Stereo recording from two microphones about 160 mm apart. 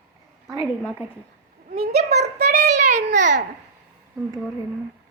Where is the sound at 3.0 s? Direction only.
90° right.